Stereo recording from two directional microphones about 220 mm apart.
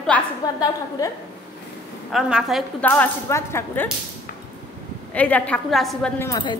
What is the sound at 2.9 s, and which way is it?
Speech, 10° left (ahead or behind).